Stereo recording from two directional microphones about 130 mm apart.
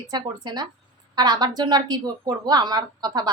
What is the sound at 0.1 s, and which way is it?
A woman's voice, 30° right (ahead or behind).